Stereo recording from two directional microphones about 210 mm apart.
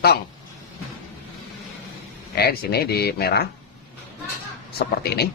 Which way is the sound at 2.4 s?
50° left (ahead or behind).